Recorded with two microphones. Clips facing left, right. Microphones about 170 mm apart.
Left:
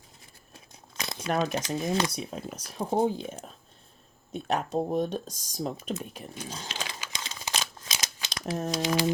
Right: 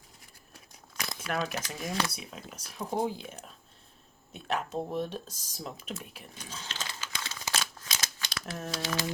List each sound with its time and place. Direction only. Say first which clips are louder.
0.5 s crumpling: left 1 dB; 25° left (ahead or behind)
1.7 s speech: left 6 dB; 25° left (ahead or behind)
4.3 s speech: left 4 dB; 40° left (ahead or behind)
6.7 s crumpling: left 3 dB; 15° left (ahead or behind)
8.7 s speech: left 6 dB; 15° left (ahead or behind)